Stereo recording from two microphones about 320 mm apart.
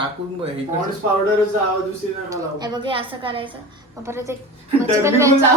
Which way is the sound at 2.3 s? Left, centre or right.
Centre.